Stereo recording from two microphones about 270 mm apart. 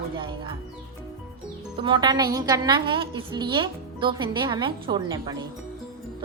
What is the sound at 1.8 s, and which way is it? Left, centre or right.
A woman's voice, centre.